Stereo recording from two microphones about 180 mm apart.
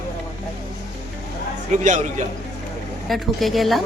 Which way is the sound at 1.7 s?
40° right (ahead or behind).